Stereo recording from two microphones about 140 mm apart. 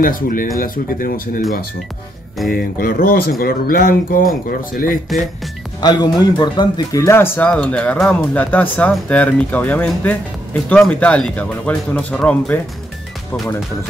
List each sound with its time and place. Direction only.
0.0 s speech: 80° left
0.6 s speech: 90° left
2.5 s speech: 90° left
5.8 s speech: 30° left (ahead or behind); by 12.5 s 10° left (ahead or behind)